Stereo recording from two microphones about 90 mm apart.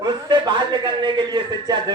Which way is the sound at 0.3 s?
55° right (ahead or behind).